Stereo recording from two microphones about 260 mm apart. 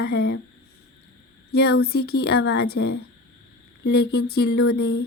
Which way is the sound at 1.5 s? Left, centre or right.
Left.